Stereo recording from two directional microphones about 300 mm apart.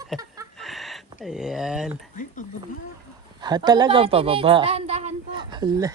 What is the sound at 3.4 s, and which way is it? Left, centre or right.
A woman's voice, centre.